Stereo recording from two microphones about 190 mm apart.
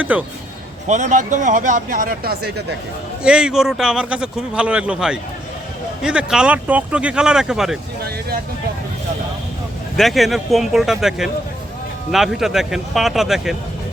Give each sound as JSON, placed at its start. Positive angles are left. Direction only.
{"t": 0.0, "sound": "a man's voice", "side_deg": -10}
{"t": 0.9, "sound": "speech", "side_deg": -40}
{"t": 3.2, "sound": "a man's voice", "side_deg": -5}
{"t": 10.0, "sound": "a man's voice", "side_deg": 0}